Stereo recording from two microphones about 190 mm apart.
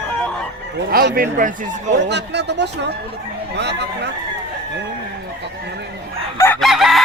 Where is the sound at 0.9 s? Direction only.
55° right (ahead or behind).